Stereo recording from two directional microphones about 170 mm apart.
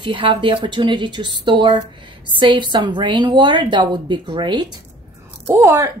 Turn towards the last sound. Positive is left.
turn(degrees=-15)  # may be behind; listen again after turning